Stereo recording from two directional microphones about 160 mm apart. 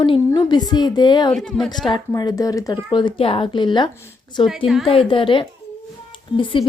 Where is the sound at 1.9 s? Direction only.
25° left (ahead or behind).